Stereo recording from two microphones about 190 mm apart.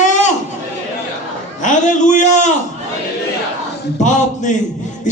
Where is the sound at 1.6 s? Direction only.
40° left (ahead or behind).